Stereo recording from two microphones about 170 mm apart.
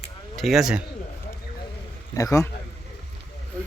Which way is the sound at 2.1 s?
20° left (ahead or behind).